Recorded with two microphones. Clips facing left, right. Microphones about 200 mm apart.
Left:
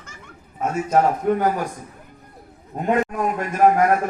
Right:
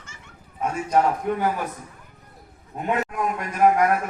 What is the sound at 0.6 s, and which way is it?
A man's voice, 45° left (ahead or behind).